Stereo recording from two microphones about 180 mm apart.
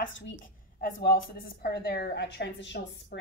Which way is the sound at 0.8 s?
60° left (ahead or behind).